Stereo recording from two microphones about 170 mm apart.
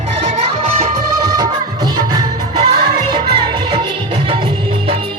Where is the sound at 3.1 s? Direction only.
30° right (ahead or behind).